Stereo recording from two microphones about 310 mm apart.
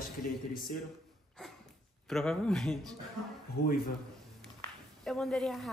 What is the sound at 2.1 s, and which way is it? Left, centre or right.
Speech, centre.